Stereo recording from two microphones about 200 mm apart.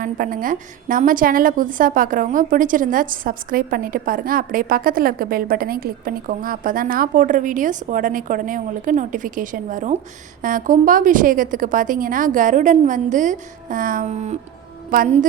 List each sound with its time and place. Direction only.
0.0 s a woman's voice: 45° right (ahead or behind)